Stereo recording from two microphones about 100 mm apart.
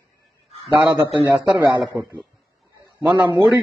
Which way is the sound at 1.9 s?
15° right (ahead or behind).